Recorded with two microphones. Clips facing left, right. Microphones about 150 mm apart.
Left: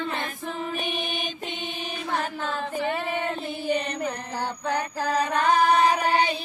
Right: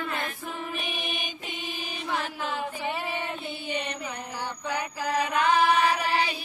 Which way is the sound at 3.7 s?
45° left (ahead or behind).